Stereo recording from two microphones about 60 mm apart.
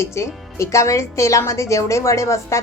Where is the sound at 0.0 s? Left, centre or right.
Left.